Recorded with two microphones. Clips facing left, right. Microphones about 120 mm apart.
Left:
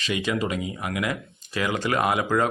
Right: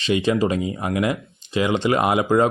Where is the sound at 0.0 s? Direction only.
30° right (ahead or behind).